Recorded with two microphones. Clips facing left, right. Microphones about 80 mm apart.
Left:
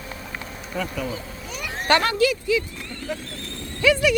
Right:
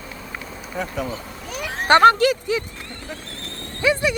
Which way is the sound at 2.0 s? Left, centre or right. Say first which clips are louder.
Right 8 dB; right.